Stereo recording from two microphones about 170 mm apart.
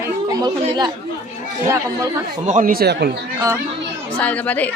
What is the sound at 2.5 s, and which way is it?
Speech, 50° right (ahead or behind).